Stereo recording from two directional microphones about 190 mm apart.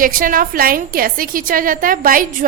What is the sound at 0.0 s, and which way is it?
A woman's voice, 45° right (ahead or behind).